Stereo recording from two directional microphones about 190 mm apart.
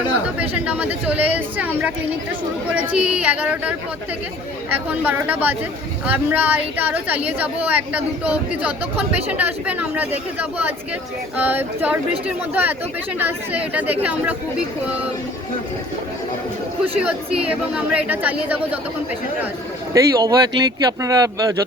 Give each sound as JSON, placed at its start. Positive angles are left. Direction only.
{"t": 0.3, "sound": "a woman's voice", "side_deg": -5}
{"t": 2.9, "sound": "a woman's voice", "side_deg": -5}
{"t": 13.1, "sound": "a woman's voice", "side_deg": -10}
{"t": 17.0, "sound": "a woman's voice", "side_deg": -5}
{"t": 19.9, "sound": "speech", "side_deg": -20}